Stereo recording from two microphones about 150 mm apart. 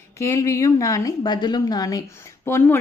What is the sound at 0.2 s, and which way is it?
A woman's voice, 20° left (ahead or behind).